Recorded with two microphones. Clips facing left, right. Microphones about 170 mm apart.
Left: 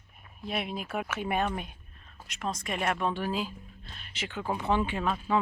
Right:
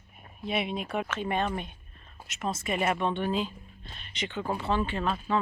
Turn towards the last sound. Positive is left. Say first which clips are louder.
# even
turn(degrees=10)  # may be behind; listen again after turning